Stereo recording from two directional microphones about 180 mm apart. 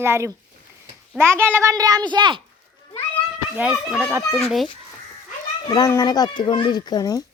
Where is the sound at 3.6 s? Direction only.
5° right (ahead or behind).